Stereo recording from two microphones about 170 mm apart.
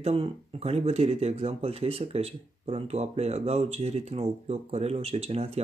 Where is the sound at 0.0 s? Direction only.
35° right (ahead or behind).